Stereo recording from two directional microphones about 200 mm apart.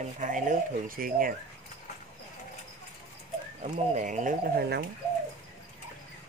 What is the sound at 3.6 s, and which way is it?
Speech, 35° right (ahead or behind).